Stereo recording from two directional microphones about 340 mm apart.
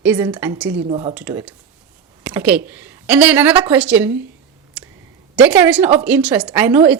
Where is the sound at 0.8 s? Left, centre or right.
Centre.